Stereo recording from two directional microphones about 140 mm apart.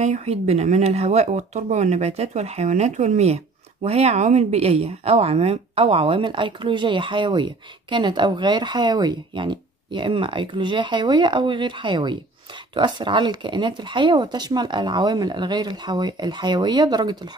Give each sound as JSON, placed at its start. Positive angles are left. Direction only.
{"t": 0.0, "sound": "speech", "side_deg": -50}